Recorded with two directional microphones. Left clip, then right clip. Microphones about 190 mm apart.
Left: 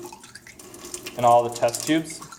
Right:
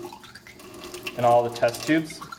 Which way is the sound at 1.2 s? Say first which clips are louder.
Left 2 dB; 20° left (ahead or behind).